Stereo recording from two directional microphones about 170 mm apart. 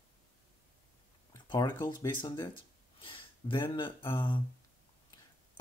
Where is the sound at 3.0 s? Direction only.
30° left (ahead or behind).